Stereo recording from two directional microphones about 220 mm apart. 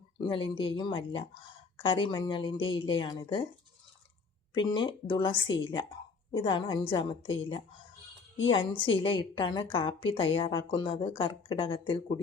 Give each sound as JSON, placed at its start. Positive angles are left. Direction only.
{"t": 0.2, "sound": "speech", "side_deg": 25}
{"t": 4.5, "sound": "speech", "side_deg": 20}